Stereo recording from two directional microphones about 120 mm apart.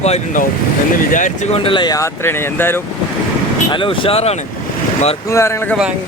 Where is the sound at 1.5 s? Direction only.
45° left (ahead or behind).